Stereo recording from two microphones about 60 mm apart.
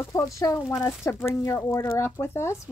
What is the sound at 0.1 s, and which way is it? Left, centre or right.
Speech, left.